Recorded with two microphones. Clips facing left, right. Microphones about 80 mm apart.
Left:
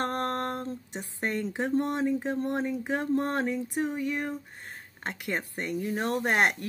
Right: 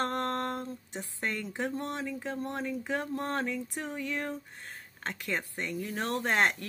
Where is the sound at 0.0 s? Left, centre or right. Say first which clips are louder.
Left 2 dB; left.